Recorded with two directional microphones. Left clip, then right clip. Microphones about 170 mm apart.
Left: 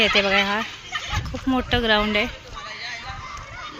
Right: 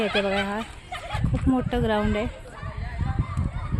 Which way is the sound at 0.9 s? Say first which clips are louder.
Left 3 dB; 55° right (ahead or behind).